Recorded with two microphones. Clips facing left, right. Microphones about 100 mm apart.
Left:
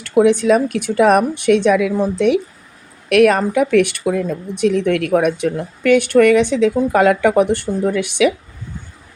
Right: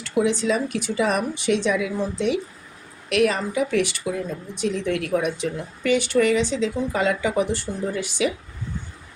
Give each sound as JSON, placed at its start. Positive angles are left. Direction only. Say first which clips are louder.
{"t": 0.0, "sound": "speech", "louder": "left 8 dB", "side_deg": 55}